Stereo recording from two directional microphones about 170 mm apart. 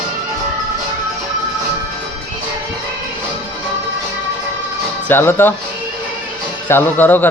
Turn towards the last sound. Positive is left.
turn(degrees=10)  # may be behind; listen again after turning